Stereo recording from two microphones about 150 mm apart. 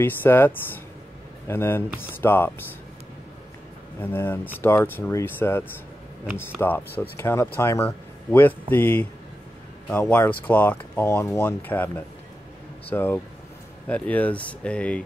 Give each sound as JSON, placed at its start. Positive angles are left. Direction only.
{"t": 0.0, "sound": "speech", "side_deg": 15}
{"t": 4.0, "sound": "speech", "side_deg": 15}
{"t": 6.6, "sound": "speech", "side_deg": 10}